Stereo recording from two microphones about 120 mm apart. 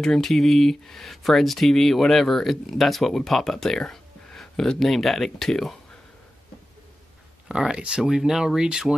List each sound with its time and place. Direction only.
0.0 s speech: 5° left (ahead or behind)
7.4 s speech: 5° right (ahead or behind)